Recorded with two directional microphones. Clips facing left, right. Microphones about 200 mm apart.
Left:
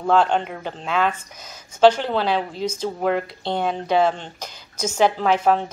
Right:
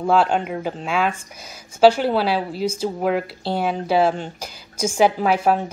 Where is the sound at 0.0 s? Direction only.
10° right (ahead or behind).